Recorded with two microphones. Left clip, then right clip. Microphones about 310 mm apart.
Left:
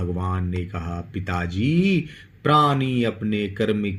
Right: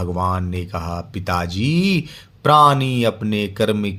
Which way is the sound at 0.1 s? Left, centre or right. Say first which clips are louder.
Right 7 dB; right.